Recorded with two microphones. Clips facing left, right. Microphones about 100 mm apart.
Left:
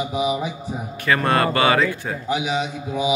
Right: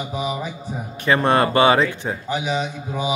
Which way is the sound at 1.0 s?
25° right (ahead or behind).